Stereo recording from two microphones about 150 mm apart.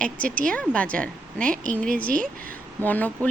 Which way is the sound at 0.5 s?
10° left (ahead or behind).